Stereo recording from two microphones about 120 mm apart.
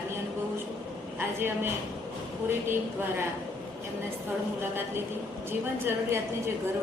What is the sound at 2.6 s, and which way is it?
Speech, 20° right (ahead or behind).